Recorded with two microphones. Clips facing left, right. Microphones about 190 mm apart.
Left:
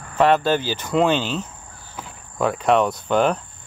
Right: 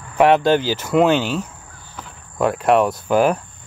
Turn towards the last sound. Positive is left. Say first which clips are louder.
# right 3 dB
turn(degrees=-5)  # may be behind; listen again after turning